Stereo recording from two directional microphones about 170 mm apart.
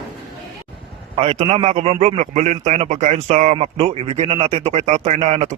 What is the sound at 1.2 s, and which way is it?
A man's voice, 35° right (ahead or behind).